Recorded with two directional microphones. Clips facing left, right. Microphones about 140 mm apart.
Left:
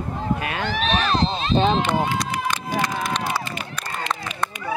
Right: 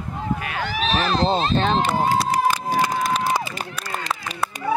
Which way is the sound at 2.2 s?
40° right (ahead or behind).